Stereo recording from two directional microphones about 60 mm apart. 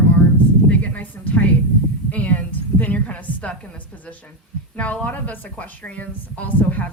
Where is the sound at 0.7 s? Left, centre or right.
Left.